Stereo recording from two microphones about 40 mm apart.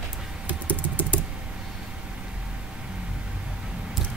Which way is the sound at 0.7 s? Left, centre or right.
Left.